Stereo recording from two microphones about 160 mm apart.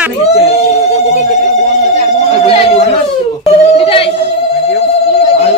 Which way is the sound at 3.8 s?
35° left (ahead or behind).